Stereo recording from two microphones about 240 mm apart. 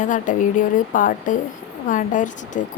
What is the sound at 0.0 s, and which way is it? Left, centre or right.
A woman's voice, left.